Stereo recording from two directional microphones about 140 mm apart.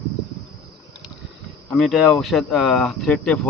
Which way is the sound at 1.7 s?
Centre (ahead or behind).